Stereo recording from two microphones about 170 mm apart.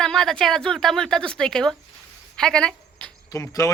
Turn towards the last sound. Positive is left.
turn(degrees=20)  # may be behind; listen again after turning